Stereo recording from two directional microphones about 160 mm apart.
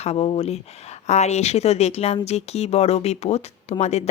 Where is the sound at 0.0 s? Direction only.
40° left (ahead or behind).